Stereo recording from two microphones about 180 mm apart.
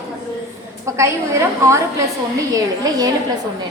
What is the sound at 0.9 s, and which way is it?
Speech, 15° right (ahead or behind).